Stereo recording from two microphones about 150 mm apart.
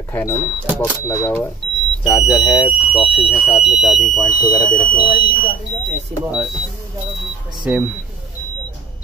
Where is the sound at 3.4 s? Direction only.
10° left (ahead or behind).